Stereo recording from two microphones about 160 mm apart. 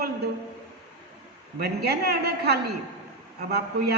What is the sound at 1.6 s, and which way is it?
A man's voice, 85° right.